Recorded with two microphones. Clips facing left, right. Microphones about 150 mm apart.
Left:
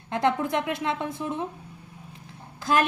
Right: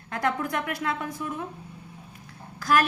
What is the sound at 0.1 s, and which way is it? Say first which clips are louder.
A woman's voice: left 3 dB; 20° left (ahead or behind).